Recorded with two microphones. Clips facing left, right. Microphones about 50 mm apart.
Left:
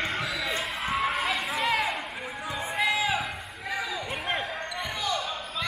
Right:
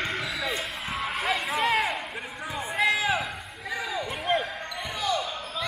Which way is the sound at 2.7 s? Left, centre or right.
Centre.